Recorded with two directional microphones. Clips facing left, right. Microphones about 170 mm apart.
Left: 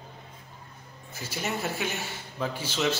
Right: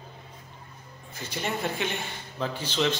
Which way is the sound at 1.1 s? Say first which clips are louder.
Right 1 dB; 5° left (ahead or behind).